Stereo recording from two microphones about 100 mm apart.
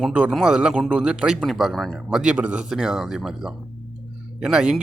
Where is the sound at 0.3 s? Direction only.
5° right (ahead or behind).